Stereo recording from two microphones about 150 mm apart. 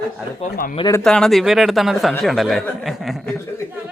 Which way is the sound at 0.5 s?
75° left (ahead or behind).